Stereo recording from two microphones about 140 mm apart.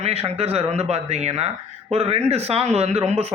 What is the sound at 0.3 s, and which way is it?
Speech, 45° right (ahead or behind).